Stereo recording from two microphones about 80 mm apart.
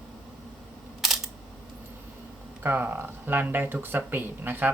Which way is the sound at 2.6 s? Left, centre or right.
Right.